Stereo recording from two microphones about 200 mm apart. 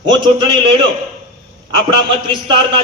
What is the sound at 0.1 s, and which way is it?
Speech, 25° right (ahead or behind).